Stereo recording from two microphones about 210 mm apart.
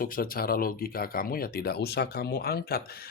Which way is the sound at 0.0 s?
45° left (ahead or behind).